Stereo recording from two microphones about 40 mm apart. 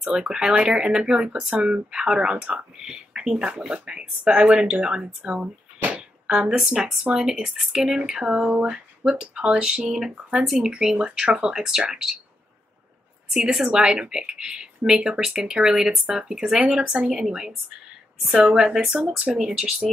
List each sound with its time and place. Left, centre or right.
0.0 s speech: right
5.8 s a sound: right
6.2 s speech: right
13.5 s speech: centre
17.2 s speech: centre